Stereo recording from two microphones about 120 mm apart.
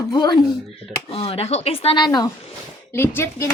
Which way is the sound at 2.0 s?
35° left (ahead or behind).